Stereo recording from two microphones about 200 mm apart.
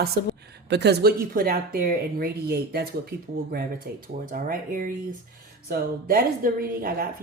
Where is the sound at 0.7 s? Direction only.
55° right (ahead or behind).